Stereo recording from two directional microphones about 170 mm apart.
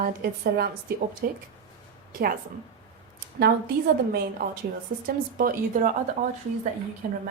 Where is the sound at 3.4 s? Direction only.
65° right (ahead or behind).